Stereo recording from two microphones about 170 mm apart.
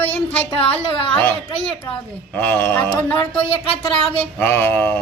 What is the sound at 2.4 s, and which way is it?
Speech, 10° left (ahead or behind).